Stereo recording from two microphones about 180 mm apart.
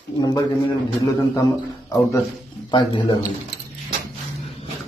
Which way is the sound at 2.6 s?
25° left (ahead or behind).